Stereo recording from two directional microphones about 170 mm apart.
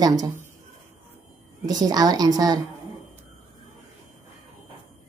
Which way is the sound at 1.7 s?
20° right (ahead or behind).